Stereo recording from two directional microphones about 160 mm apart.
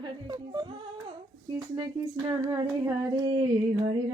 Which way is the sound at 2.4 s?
20° right (ahead or behind).